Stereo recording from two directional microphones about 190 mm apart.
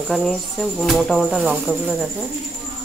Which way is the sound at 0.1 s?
5° left (ahead or behind).